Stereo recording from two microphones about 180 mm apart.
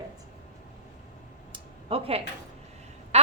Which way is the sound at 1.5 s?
30° right (ahead or behind).